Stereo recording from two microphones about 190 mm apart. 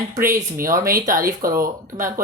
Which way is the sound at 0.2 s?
50° right (ahead or behind).